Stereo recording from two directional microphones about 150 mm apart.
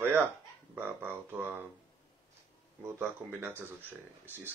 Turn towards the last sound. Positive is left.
turn(degrees=-15)  # may be behind; listen again after turning